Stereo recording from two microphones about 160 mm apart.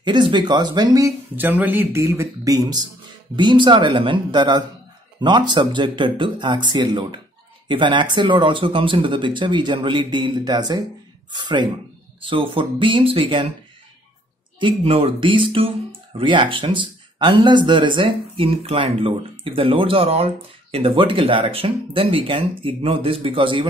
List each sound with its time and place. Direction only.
0.0 s speech: 30° right (ahead or behind)
14.6 s speech: 35° right (ahead or behind)